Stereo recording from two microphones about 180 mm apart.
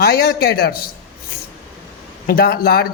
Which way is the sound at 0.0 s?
60° left (ahead or behind).